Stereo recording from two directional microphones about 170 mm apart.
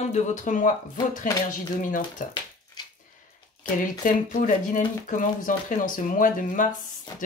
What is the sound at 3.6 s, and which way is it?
Speech, 50° left (ahead or behind).